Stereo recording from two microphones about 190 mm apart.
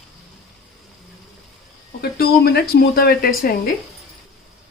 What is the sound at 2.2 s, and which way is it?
Speech, 55° left (ahead or behind).